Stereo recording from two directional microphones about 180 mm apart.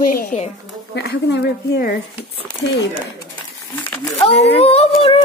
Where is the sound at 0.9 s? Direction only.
70° left (ahead or behind).